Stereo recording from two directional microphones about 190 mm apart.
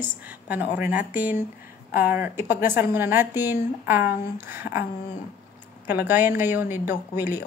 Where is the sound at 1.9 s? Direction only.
50° left (ahead or behind).